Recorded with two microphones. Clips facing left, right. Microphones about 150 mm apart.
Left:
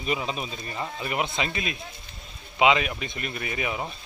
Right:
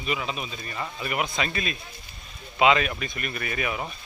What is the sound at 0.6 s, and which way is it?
Speech, 20° left (ahead or behind).